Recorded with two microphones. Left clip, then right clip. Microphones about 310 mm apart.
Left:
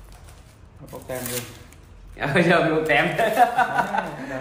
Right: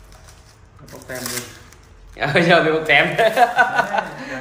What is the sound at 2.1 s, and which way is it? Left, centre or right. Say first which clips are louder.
A man's voice: right 4 dB; right.